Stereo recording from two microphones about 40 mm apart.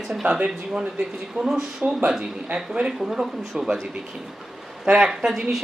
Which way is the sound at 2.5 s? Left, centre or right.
Right.